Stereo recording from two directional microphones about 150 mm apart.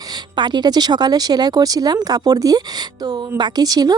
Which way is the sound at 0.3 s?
30° right (ahead or behind).